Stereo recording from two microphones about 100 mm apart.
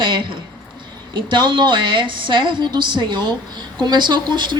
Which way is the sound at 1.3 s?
50° right (ahead or behind).